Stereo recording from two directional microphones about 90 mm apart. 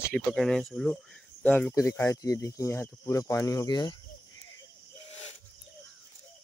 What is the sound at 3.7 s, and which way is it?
Speech, 55° left (ahead or behind).